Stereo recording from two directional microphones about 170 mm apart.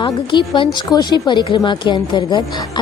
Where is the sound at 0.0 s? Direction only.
30° left (ahead or behind).